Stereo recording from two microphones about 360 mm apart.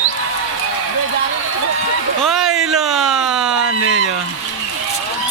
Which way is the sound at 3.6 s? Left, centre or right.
Right.